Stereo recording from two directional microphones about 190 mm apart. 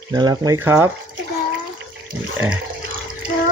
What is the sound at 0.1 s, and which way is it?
Speech, 20° right (ahead or behind).